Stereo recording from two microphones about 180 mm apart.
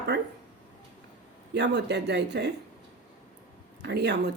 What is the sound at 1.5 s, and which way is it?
Speech, 70° right (ahead or behind).